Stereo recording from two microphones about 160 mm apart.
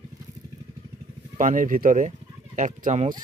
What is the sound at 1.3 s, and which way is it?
Speech, 55° right (ahead or behind).